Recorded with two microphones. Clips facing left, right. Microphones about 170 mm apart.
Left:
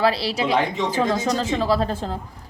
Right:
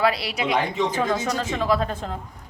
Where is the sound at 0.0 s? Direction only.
30° left (ahead or behind).